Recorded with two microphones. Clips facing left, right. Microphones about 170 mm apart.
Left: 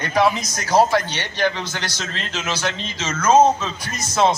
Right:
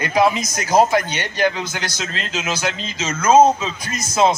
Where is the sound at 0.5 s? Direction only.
15° right (ahead or behind).